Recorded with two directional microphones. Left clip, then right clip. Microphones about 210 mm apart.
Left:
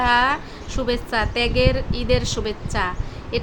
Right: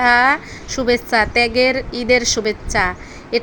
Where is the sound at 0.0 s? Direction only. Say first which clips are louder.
Right 5 dB; 25° right (ahead or behind).